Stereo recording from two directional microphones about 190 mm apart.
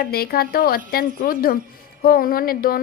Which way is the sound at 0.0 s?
55° left (ahead or behind).